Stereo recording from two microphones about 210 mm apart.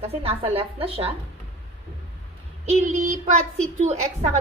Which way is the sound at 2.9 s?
35° right (ahead or behind).